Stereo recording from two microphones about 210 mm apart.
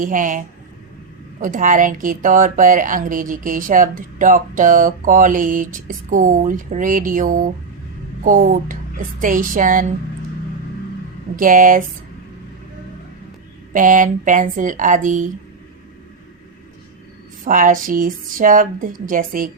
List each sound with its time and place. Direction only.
0.0 s speech: 40° right (ahead or behind)
11.3 s speech: 40° right (ahead or behind)
13.7 s speech: 40° right (ahead or behind)
17.4 s speech: 40° right (ahead or behind)